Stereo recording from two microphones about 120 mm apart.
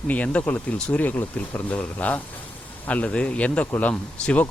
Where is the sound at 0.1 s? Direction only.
10° left (ahead or behind).